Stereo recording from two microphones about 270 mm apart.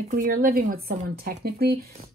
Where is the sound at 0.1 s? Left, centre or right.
Right.